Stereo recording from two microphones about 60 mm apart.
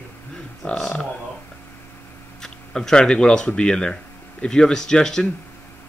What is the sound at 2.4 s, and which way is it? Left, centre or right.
Speech, centre.